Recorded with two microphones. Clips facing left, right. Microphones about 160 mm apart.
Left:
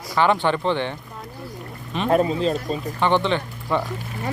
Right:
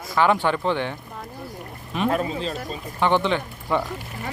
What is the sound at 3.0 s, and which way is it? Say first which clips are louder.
Speech: even; 10° right (ahead or behind).